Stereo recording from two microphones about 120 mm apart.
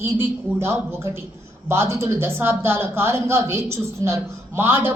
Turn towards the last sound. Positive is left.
turn(degrees=-20)  # may be behind; listen again after turning